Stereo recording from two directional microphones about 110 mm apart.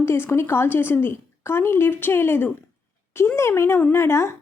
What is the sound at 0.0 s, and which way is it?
A woman's voice, 25° left (ahead or behind).